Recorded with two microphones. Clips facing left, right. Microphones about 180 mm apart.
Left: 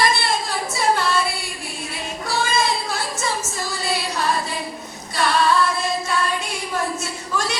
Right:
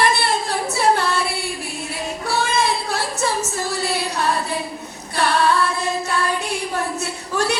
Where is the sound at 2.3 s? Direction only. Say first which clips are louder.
Right 1 dB; 65° right (ahead or behind).